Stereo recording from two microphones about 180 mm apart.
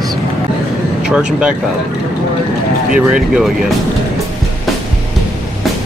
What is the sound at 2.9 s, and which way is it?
Speech, 5° right (ahead or behind).